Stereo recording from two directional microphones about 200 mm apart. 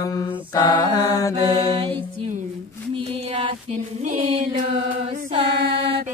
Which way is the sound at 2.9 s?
25° right (ahead or behind).